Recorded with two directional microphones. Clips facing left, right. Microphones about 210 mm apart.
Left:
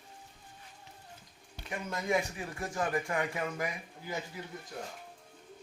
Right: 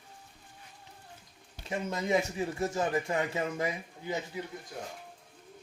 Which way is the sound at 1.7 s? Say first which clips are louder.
Right 3 dB; 25° right (ahead or behind).